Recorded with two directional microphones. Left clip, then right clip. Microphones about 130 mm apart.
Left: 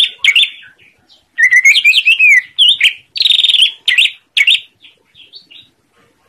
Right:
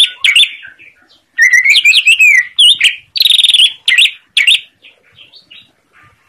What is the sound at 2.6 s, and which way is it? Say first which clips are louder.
Bird: right 2 dB; 35° left (ahead or behind).